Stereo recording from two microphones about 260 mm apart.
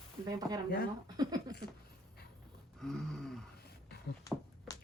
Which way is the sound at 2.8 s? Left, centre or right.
Centre.